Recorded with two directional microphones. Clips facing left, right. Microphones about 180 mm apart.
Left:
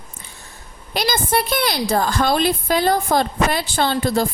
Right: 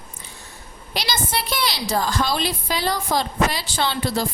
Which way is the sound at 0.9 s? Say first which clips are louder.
Left 6 dB; 50° left (ahead or behind).